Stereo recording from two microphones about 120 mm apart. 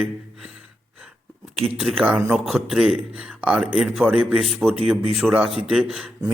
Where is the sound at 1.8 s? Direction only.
5° right (ahead or behind).